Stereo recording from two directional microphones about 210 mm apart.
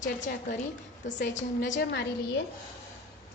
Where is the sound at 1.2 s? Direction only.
60° left (ahead or behind).